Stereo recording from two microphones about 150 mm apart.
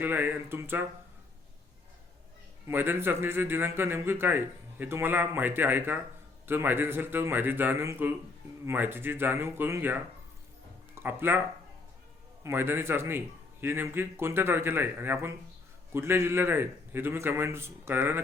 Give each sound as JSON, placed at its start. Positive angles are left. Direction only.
{"t": 0.0, "sound": "a man's voice", "side_deg": -10}
{"t": 2.6, "sound": "a man's voice", "side_deg": -15}
{"t": 12.4, "sound": "a man's voice", "side_deg": -15}